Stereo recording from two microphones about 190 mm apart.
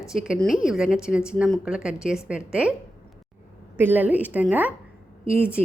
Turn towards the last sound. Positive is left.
turn(degrees=-5)  # may be behind; listen again after turning